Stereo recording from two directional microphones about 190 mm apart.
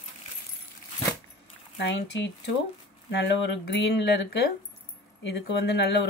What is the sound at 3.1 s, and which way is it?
Speech, 65° left (ahead or behind).